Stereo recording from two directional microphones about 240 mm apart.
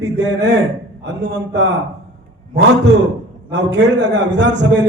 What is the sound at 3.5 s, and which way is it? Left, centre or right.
A man's voice, right.